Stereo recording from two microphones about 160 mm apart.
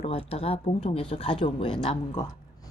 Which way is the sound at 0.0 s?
35° left (ahead or behind).